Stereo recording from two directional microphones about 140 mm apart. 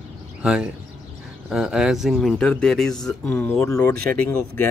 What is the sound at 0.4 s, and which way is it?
A man's voice, 5° right (ahead or behind).